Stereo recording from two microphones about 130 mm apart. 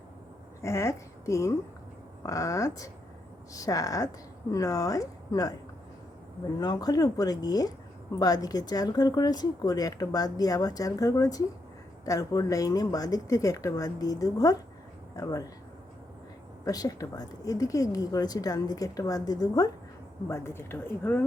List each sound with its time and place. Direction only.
0.6 s a woman's voice: 25° left (ahead or behind)
6.6 s speech: 30° left (ahead or behind)
16.6 s speech: 30° left (ahead or behind)